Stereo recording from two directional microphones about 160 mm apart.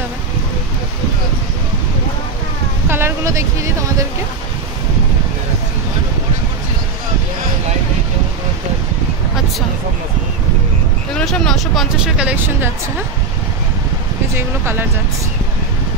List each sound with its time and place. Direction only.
2.9 s a sound: 15° right (ahead or behind)
11.1 s speech: 5° left (ahead or behind)
14.3 s speech: 15° right (ahead or behind)